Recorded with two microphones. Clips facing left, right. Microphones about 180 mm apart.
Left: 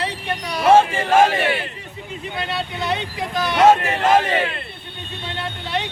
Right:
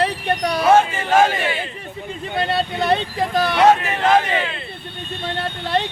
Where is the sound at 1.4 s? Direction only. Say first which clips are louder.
Left 2 dB; 70° left (ahead or behind).